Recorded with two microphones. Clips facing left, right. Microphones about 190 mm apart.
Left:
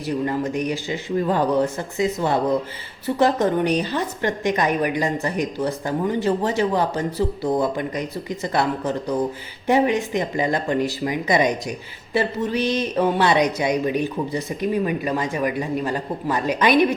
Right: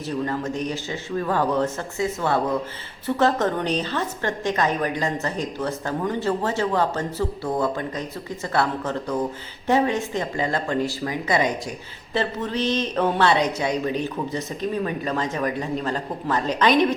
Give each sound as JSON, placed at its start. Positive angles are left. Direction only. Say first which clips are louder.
{"t": 0.1, "sound": "a woman's voice", "louder": "left 3 dB", "side_deg": 15}